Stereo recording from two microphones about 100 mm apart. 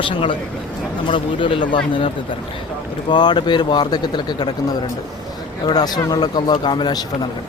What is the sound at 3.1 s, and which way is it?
Speech, 50° left (ahead or behind).